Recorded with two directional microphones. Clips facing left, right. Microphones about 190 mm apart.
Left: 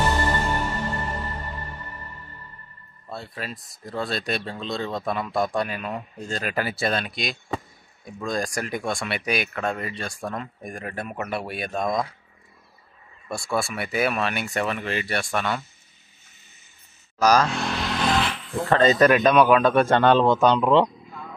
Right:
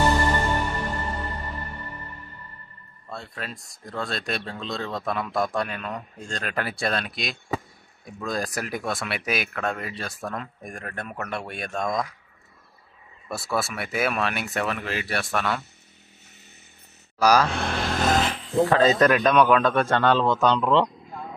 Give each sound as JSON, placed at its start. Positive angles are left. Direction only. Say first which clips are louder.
{"t": 3.1, "sound": "speech", "louder": "left 2 dB", "side_deg": 0}
{"t": 11.9, "sound": "speech", "louder": "left 2 dB", "side_deg": 25}
{"t": 13.3, "sound": "speech", "louder": "left 1 dB", "side_deg": -5}
{"t": 17.2, "sound": "speech", "louder": "even", "side_deg": -10}
{"t": 17.5, "sound": "vehicle", "louder": "even", "side_deg": -55}
{"t": 18.7, "sound": "speech", "louder": "left 3 dB", "side_deg": 0}